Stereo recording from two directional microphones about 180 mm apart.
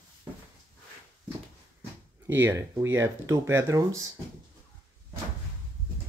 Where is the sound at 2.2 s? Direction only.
15° right (ahead or behind).